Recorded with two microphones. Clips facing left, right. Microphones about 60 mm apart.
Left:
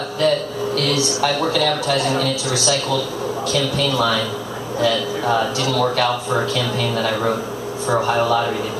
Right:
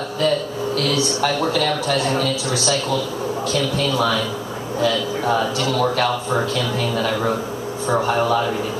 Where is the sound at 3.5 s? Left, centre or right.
Left.